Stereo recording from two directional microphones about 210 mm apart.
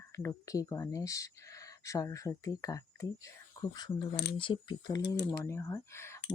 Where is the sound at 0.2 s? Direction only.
15° left (ahead or behind).